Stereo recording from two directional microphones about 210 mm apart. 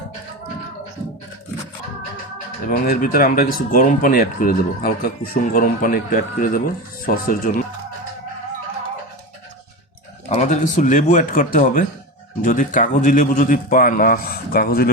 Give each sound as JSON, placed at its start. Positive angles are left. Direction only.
{"t": 2.6, "sound": "a man's voice", "side_deg": 45}
{"t": 10.2, "sound": "a man's voice", "side_deg": 35}